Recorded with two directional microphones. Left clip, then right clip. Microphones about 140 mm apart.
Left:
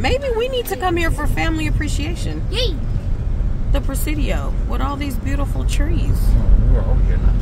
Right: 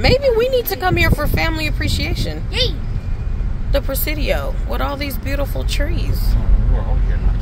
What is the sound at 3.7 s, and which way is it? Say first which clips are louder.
Speech: right 5 dB; 15° right (ahead or behind).